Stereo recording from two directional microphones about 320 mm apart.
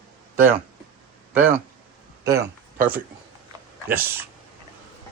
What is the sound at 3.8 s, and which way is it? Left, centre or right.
Speech, centre.